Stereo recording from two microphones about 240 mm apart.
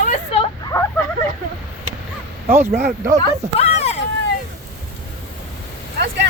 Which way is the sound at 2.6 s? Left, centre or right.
Right.